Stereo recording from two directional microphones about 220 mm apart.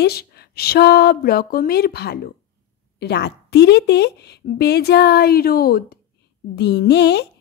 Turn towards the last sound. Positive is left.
turn(degrees=50)  # may be behind; listen again after turning